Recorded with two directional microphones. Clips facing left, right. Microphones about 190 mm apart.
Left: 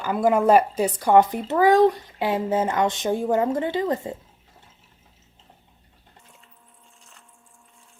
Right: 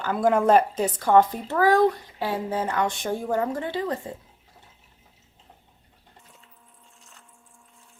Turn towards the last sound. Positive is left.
turn(degrees=0)  # may be behind; listen again after turning